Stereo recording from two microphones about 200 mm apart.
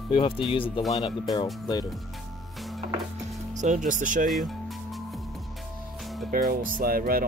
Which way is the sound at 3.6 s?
40° right (ahead or behind).